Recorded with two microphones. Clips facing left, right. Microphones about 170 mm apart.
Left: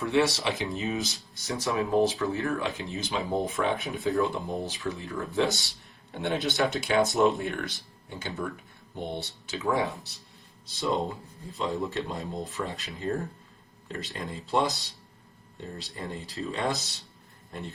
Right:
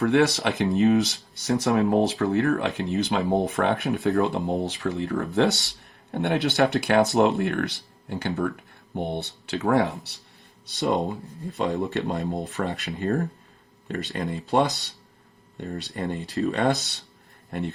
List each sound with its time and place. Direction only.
0.0 s a man's voice: 65° right (ahead or behind)